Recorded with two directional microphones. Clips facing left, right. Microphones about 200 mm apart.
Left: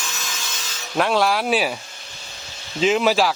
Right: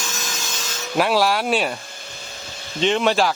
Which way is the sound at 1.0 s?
Centre (ahead or behind).